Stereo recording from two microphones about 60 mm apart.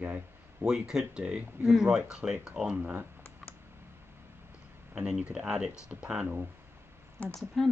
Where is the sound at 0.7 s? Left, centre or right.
Centre.